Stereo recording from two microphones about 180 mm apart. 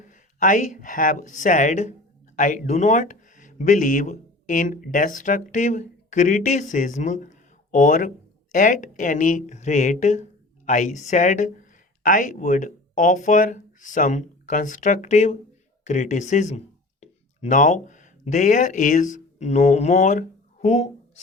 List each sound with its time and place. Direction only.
0.0 s speech: 45° left (ahead or behind)